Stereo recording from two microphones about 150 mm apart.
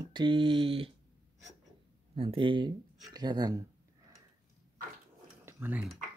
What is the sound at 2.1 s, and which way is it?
Speech, 35° right (ahead or behind).